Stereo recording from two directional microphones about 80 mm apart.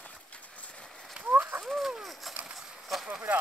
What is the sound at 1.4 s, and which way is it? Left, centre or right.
Fowl, right.